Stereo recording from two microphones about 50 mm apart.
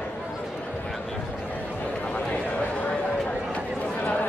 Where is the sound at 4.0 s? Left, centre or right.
Left.